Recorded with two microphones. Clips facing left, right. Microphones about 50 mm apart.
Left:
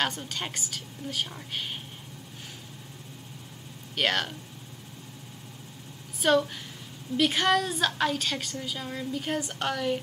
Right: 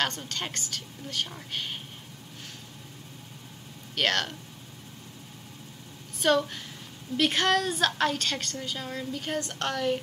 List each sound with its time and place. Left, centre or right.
0.0 s a woman's voice: centre
3.9 s a woman's voice: centre
6.2 s a woman's voice: centre